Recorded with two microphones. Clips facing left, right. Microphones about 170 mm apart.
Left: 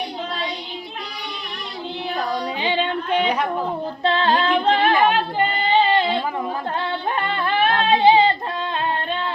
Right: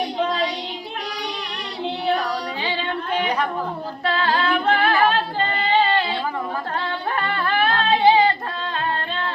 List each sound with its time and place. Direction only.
2.6 s female singing: 20° left (ahead or behind)
4.0 s singing: 25° left (ahead or behind)
7.2 s a sound: 20° left (ahead or behind)